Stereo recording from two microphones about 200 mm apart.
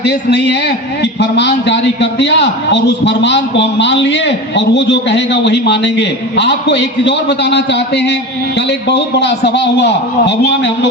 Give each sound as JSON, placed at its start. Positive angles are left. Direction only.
{"t": 0.0, "sound": "a man's voice", "side_deg": 55}